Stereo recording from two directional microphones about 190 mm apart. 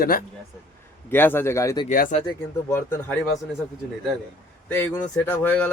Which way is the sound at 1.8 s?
45° left (ahead or behind).